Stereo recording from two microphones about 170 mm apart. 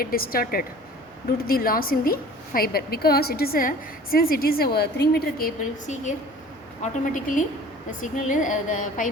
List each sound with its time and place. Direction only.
0.0 s a woman's voice: 60° left (ahead or behind)